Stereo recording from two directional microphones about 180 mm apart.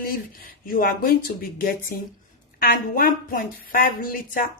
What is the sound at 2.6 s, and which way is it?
A woman's voice, 55° left (ahead or behind).